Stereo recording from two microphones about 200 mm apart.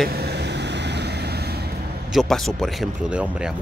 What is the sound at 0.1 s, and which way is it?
Vehicle, 55° right (ahead or behind).